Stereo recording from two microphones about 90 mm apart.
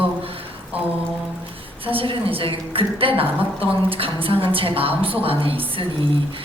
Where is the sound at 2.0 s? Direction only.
90° right.